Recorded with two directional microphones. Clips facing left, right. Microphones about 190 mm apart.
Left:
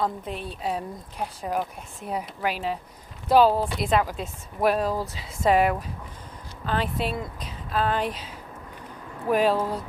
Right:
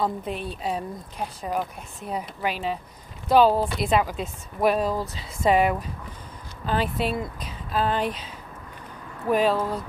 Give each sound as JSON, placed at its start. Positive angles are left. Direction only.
{"t": 0.0, "sound": "a woman's voice", "side_deg": 0}